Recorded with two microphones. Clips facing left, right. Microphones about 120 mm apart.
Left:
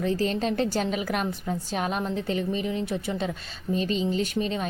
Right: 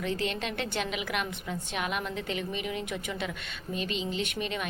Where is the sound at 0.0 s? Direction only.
35° left (ahead or behind).